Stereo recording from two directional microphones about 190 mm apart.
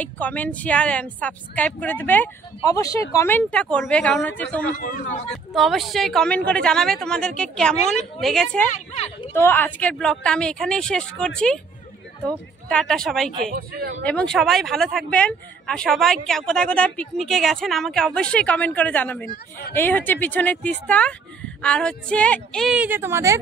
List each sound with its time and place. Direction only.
0.0 s speech: 10° left (ahead or behind)
4.7 s speech: 45° left (ahead or behind)
5.3 s speech: centre (ahead or behind)
8.7 s speech: 35° left (ahead or behind)
9.3 s speech: 10° left (ahead or behind)
13.6 s speech: 55° right (ahead or behind)
14.0 s speech: 5° left (ahead or behind); by 23.4 s 15° right (ahead or behind)